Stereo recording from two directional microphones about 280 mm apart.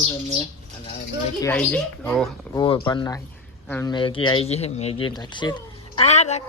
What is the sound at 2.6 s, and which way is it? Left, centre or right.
Speech, centre.